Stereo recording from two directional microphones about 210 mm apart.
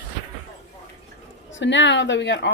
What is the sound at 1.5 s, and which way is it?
Speech, 60° left (ahead or behind).